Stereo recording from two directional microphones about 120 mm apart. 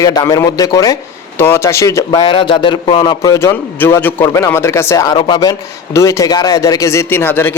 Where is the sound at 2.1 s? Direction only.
45° left (ahead or behind); by 5.0 s 25° left (ahead or behind).